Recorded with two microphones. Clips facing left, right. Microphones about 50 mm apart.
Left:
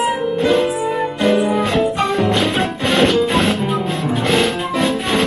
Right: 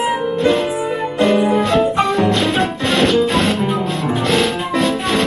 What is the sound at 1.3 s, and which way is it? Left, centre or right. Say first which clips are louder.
Music: right 2 dB; centre.